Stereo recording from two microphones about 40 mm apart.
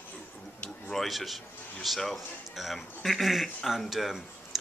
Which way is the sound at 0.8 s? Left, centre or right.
Centre.